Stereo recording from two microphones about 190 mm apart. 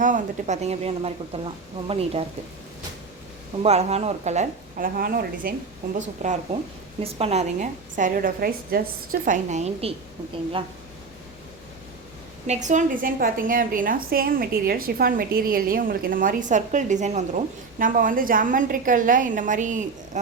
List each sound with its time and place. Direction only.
0.0 s speech: 40° right (ahead or behind)
3.6 s speech: 35° right (ahead or behind); by 6.0 s 50° right (ahead or behind)
7.0 s a woman's voice: 35° right (ahead or behind); by 8.8 s 50° right (ahead or behind)
9.2 s speech: 40° right (ahead or behind)
12.5 s a woman's voice: 40° right (ahead or behind)